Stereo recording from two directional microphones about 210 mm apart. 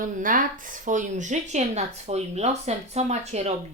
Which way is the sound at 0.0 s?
40° right (ahead or behind).